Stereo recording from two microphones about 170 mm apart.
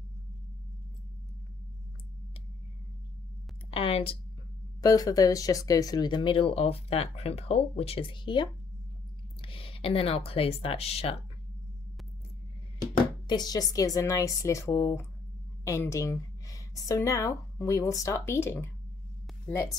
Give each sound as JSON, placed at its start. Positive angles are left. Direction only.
{"t": 3.7, "sound": "speech", "side_deg": 35}
{"t": 4.8, "sound": "speech", "side_deg": 20}
{"t": 13.3, "sound": "a woman's voice", "side_deg": 25}
{"t": 19.2, "sound": "a sound", "side_deg": 10}